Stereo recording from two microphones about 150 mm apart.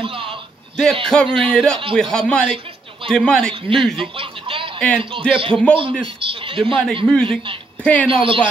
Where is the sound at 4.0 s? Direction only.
35° right (ahead or behind).